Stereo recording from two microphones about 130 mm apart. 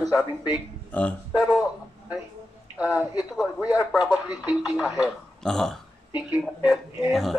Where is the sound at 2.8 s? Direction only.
10° right (ahead or behind).